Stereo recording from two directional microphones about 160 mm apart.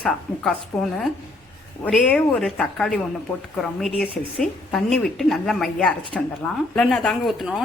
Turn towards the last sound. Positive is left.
turn(degrees=0)  # may be behind; listen again after turning